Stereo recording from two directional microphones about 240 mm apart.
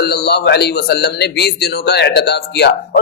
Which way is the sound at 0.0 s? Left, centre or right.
Left.